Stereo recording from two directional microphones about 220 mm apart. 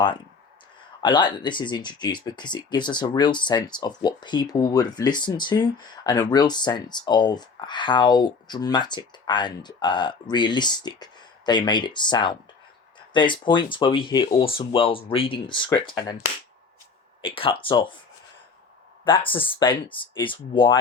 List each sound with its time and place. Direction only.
1.0 s speech: 20° left (ahead or behind)
17.2 s speech: 25° left (ahead or behind)
19.0 s speech: 25° left (ahead or behind)